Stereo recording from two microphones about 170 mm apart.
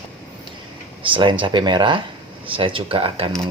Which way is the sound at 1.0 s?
30° right (ahead or behind).